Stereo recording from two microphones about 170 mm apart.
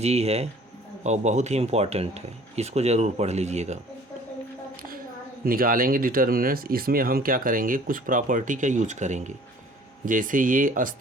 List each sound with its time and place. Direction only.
0.0 s speech: 40° right (ahead or behind)
5.5 s speech: 55° right (ahead or behind)